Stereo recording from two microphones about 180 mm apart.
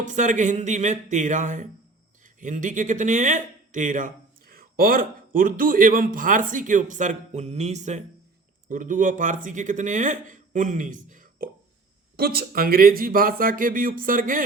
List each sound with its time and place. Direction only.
0.0 s speech: 45° right (ahead or behind)
12.1 s speech: 60° right (ahead or behind)